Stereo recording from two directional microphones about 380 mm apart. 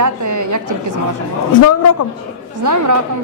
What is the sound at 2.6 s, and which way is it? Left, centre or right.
Speech, right.